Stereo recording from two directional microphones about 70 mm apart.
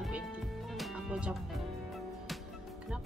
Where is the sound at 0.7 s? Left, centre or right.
Centre.